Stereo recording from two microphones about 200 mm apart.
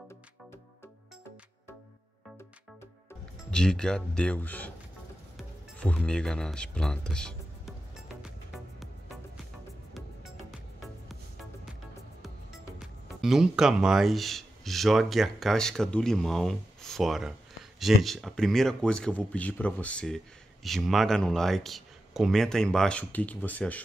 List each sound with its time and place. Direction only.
3.4 s speech: 5° left (ahead or behind)
5.8 s speech: 5° left (ahead or behind)
12.7 s speech: centre (ahead or behind)